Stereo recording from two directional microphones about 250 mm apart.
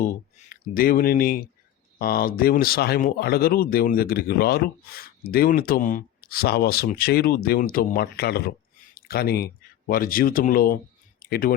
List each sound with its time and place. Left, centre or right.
0.0 s speech: left